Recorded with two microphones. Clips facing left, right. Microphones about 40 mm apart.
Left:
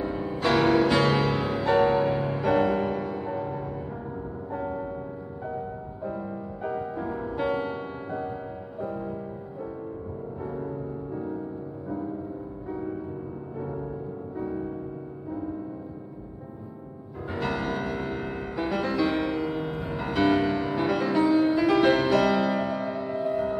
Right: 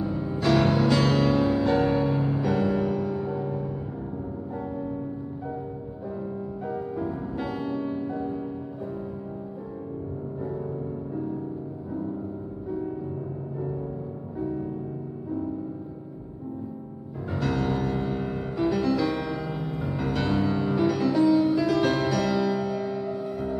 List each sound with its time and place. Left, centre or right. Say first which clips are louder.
0.0 s music: right 1 dB; left
0.8 s music: even; left
4.6 s music: left 3 dB; left
6.0 s music: even; left
10.4 s music: right 1 dB; left
17.4 s music: right 2 dB; left
20.0 s music: left 5 dB; left
20.3 s music: even; left